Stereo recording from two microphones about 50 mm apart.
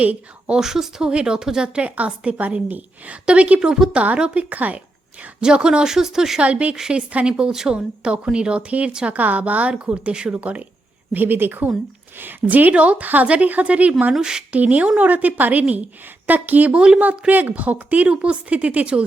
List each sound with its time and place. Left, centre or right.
0.0 s speech: right
0.5 s speech: centre
2.6 s speech: right
5.4 s speech: centre
6.4 s speech: right
6.7 s speech: centre
11.1 s speech: right
14.1 s speech: centre
14.5 s speech: right
16.7 s speech: centre
17.0 s speech: right